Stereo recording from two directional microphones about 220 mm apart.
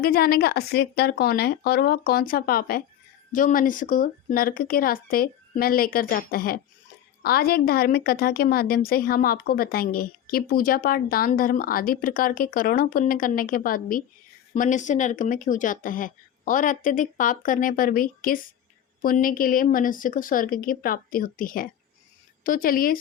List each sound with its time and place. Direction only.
0.0 s a woman's voice: 45° left (ahead or behind)